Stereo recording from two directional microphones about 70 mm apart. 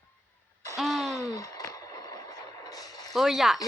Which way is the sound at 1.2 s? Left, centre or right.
Left.